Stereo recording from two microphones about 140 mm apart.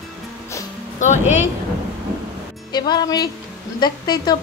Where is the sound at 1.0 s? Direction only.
55° left (ahead or behind).